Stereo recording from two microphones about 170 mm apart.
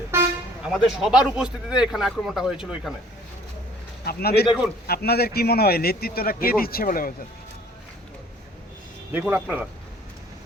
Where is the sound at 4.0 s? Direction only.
65° left (ahead or behind).